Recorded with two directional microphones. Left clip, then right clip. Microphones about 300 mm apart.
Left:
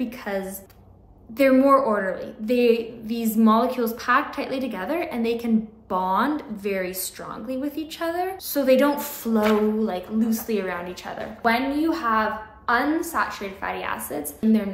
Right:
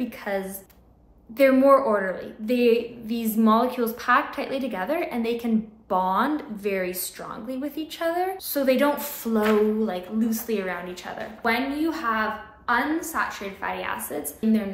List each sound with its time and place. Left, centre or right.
0.0 s speech: centre